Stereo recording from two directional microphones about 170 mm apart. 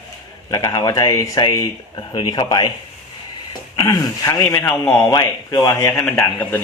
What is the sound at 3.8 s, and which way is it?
Speech, 20° left (ahead or behind).